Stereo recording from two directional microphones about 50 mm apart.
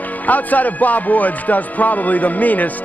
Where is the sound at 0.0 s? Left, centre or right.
Left.